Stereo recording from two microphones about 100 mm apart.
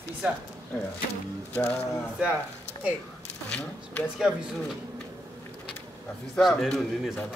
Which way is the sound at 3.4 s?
10° left (ahead or behind).